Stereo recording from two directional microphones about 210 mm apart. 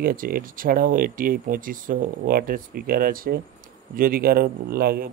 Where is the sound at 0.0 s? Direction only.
45° right (ahead or behind).